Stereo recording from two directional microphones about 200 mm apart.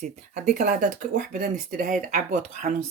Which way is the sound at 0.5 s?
40° right (ahead or behind).